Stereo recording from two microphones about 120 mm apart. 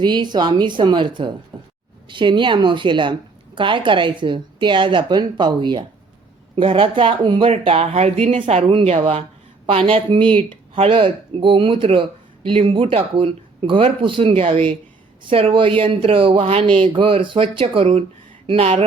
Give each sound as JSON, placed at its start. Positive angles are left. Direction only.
{"t": 0.0, "sound": "a woman's voice", "side_deg": -40}
{"t": 8.7, "sound": "a woman's voice", "side_deg": -50}